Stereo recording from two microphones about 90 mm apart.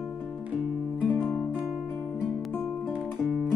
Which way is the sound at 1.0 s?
15° left (ahead or behind).